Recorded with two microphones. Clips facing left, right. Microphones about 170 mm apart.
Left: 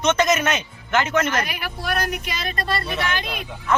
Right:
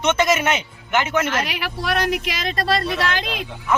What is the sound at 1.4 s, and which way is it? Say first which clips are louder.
Speech: right 3 dB; 90° right.